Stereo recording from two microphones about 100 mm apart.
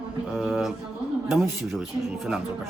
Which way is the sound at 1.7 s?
5° right (ahead or behind).